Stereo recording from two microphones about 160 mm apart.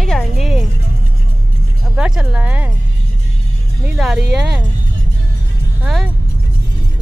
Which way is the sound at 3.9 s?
Centre (ahead or behind).